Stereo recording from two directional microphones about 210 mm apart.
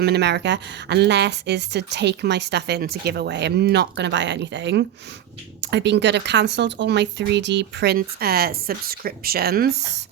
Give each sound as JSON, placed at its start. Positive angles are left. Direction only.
{"t": 0.0, "sound": "a woman's voice", "side_deg": -50}